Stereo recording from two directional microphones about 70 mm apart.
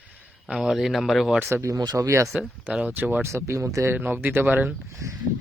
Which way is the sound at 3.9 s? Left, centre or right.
Right.